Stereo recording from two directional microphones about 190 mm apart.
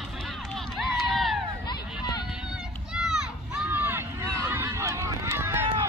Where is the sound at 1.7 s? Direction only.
20° left (ahead or behind).